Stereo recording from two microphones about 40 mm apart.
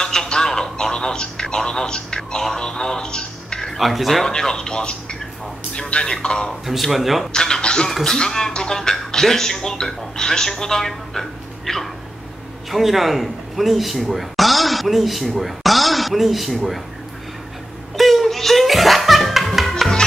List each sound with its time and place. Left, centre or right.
0.0 s telephone: centre
3.7 s speech: centre
4.3 s speech: centre
6.6 s speech: centre
7.3 s speech: centre
17.9 s music: centre